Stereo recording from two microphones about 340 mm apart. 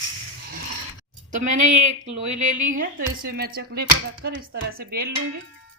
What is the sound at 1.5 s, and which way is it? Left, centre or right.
Speech, right.